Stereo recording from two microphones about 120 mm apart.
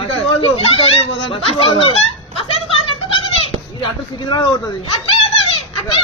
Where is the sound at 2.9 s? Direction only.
50° left (ahead or behind).